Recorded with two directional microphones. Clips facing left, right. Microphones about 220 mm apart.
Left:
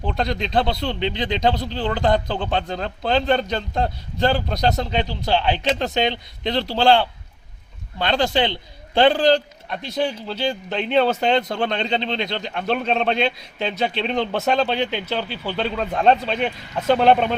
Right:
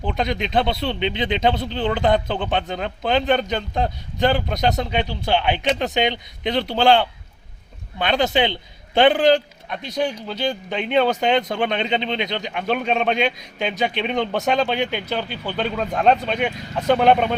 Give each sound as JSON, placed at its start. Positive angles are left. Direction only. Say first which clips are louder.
{"t": 0.0, "sound": "speech", "louder": "even", "side_deg": -5}
{"t": 0.3, "sound": "speech", "louder": "even", "side_deg": -20}
{"t": 0.6, "sound": "speech", "louder": "right 1 dB", "side_deg": 0}
{"t": 0.9, "sound": "a man's voice", "louder": "right 1 dB", "side_deg": -20}
{"t": 3.5, "sound": "speech", "louder": "even", "side_deg": 0}
{"t": 5.6, "sound": "a man's voice", "louder": "even", "side_deg": -15}
{"t": 9.6, "sound": "speech", "louder": "even", "side_deg": 5}
{"t": 10.5, "sound": "a man's voice", "louder": "left 1 dB", "side_deg": -5}
{"t": 14.1, "sound": "speech", "louder": "even", "side_deg": 0}
{"t": 14.7, "sound": "a man's voice", "louder": "even", "side_deg": -10}
{"t": 15.4, "sound": "speech", "louder": "even", "side_deg": 0}